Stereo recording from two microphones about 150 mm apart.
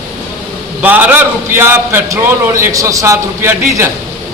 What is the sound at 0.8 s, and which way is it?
A man's voice, 10° right (ahead or behind).